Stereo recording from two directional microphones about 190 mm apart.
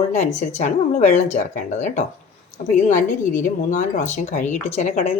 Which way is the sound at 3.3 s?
40° left (ahead or behind).